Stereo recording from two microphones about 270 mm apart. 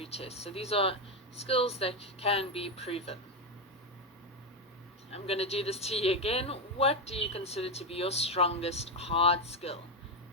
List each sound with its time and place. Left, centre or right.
0.0 s speech: left
5.1 s speech: left